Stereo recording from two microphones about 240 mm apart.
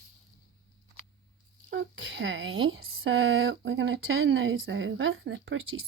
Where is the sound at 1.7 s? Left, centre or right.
Right.